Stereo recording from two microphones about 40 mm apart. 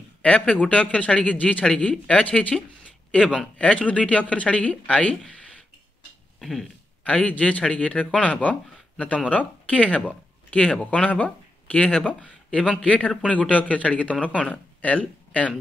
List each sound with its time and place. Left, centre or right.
0.2 s speech: left
2.5 s speech: centre
3.1 s speech: left
6.4 s throat clearing: centre
7.1 s speech: left
8.3 s speech: left